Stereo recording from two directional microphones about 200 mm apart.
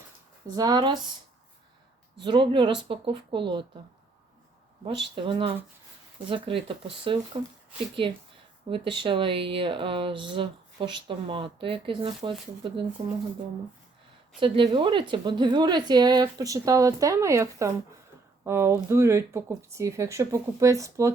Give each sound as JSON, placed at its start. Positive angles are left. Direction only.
{"t": 0.4, "sound": "a woman's voice", "side_deg": -20}
{"t": 2.2, "sound": "a woman's voice", "side_deg": -25}
{"t": 5.2, "sound": "a woman's voice", "side_deg": -25}
{"t": 8.7, "sound": "a woman's voice", "side_deg": -25}
{"t": 14.3, "sound": "a woman's voice", "side_deg": -25}